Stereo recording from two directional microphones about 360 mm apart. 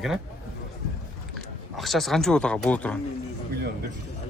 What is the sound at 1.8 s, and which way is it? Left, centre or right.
Speech, centre.